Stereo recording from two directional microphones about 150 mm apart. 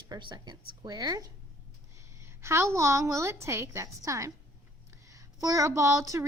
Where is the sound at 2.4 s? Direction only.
20° right (ahead or behind).